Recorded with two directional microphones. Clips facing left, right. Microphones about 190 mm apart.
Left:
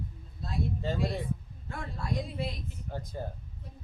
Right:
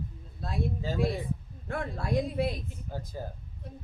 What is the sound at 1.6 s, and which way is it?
Speech, 65° right (ahead or behind).